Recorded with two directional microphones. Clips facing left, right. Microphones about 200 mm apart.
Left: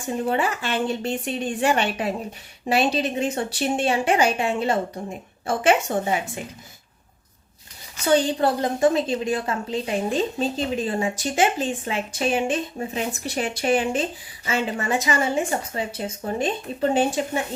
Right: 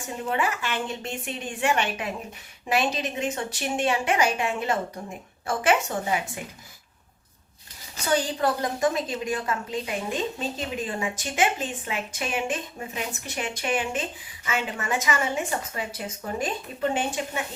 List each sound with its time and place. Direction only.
0.3 s a woman's voice: 30° left (ahead or behind)
8.1 s a woman's voice: 30° left (ahead or behind)